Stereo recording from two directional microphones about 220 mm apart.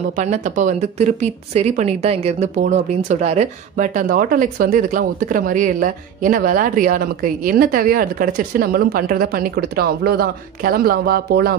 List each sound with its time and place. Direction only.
0.1 s speech: 35° right (ahead or behind)